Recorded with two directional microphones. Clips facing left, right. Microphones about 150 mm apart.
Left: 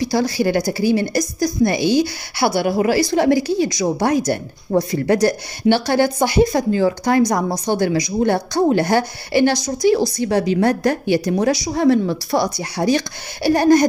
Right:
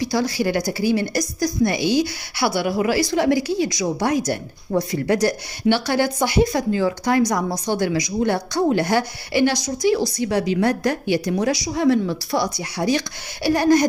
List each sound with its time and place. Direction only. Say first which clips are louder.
0.1 s a woman's voice: left 4 dB; 35° left (ahead or behind)